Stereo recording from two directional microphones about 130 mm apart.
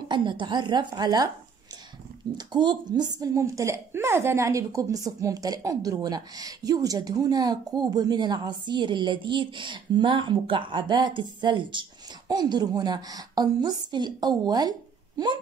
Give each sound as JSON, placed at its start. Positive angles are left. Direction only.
{"t": 0.1, "sound": "a woman's voice", "side_deg": -35}
{"t": 2.3, "sound": "a woman's voice", "side_deg": -35}